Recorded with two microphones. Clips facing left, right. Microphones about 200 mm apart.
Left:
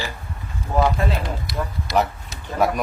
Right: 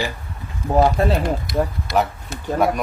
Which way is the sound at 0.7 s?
35° right (ahead or behind).